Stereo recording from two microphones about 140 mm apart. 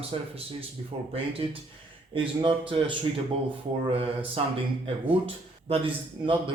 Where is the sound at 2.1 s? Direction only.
40° right (ahead or behind).